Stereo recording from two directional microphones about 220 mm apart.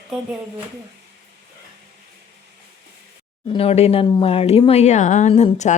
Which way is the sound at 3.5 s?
25° left (ahead or behind).